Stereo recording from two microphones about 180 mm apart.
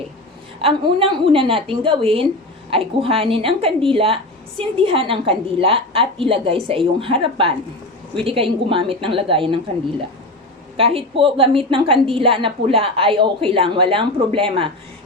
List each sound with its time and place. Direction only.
0.6 s a woman's voice: 30° right (ahead or behind)
10.8 s a woman's voice: 30° right (ahead or behind)